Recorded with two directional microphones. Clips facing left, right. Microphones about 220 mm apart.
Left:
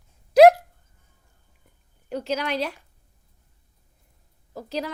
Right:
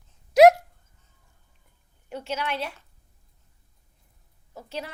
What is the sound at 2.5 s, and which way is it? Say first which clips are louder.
Speech: left 4 dB; 40° left (ahead or behind).